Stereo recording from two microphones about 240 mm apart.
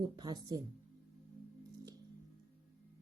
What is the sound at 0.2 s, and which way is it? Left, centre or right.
Speech, centre.